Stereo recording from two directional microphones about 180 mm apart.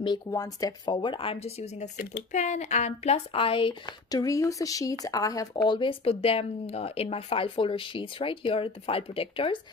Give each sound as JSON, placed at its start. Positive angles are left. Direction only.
{"t": 0.0, "sound": "speech", "side_deg": 20}